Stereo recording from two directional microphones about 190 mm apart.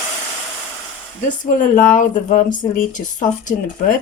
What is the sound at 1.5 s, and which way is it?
Speech, 45° left (ahead or behind).